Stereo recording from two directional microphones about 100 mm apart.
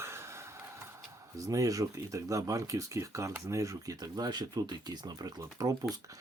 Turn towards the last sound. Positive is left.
turn(degrees=-40)  # may be behind; listen again after turning